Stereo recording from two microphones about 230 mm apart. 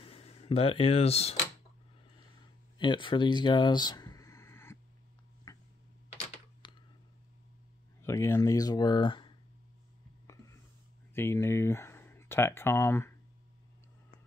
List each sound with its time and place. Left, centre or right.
0.0 s speech: left
2.8 s a sound: left
6.6 s clicking: left
8.0 s speech: centre
10.2 s whispering: centre
11.1 s speech: centre